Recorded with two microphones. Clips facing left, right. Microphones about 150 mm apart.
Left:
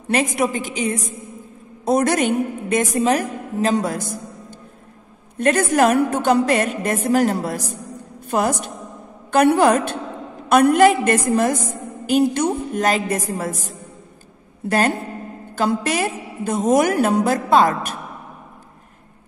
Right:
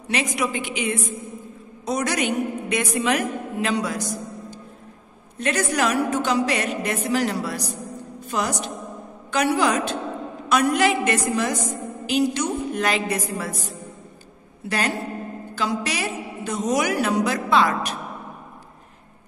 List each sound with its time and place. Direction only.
0.1 s a woman's voice: 50° left (ahead or behind)
1.9 s a woman's voice: 50° left (ahead or behind)
14.7 s a woman's voice: 45° left (ahead or behind)